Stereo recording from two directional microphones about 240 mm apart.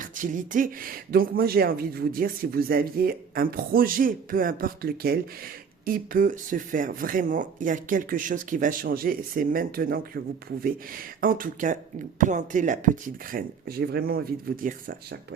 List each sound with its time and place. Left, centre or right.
0.0 s speech: right